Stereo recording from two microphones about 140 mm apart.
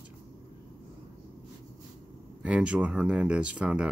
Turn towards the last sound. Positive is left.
turn(degrees=-10)  # may be behind; listen again after turning